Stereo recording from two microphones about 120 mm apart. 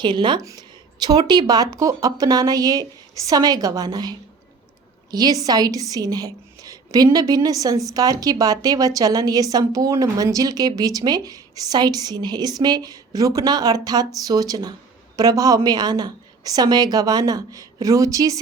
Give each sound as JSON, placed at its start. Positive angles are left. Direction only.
{"t": 0.0, "sound": "a woman's voice", "side_deg": -40}
{"t": 0.4, "sound": "a sound", "side_deg": -30}
{"t": 1.3, "sound": "a woman's voice", "side_deg": -35}
{"t": 5.1, "sound": "a woman's voice", "side_deg": -30}